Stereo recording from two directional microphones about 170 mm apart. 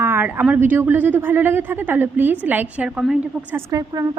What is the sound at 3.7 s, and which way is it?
Speech, 20° right (ahead or behind).